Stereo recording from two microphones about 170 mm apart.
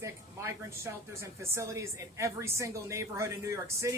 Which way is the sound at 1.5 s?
15° right (ahead or behind).